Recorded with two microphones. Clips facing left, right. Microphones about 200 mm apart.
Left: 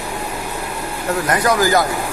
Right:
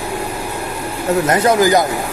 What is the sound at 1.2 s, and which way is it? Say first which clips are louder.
Speech: right 3 dB; 25° right (ahead or behind).